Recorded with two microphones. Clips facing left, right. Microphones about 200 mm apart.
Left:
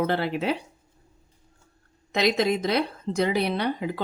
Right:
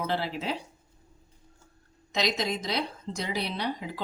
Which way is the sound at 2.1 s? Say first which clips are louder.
Left 7 dB; 55° left (ahead or behind).